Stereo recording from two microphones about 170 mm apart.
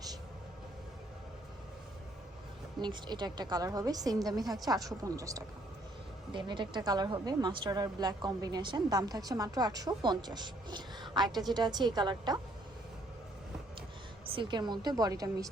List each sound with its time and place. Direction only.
2.8 s a woman's voice: 25° right (ahead or behind)
14.3 s a woman's voice: 30° right (ahead or behind)